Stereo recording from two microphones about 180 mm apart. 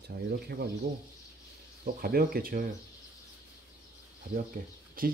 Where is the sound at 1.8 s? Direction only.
55° right (ahead or behind).